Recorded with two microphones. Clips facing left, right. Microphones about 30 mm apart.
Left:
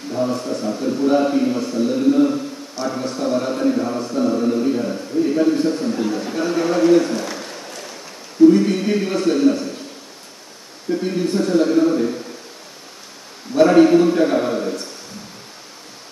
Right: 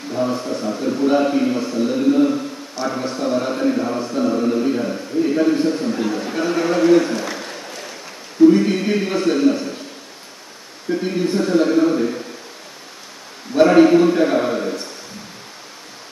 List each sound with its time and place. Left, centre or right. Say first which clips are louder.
0.1 s a man's voice: even; centre
5.6 s a man's voice: even; centre
10.9 s a man's voice: even; centre
13.6 s a man's voice: even; centre